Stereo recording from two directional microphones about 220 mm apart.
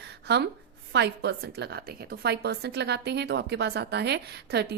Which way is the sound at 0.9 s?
50° right (ahead or behind).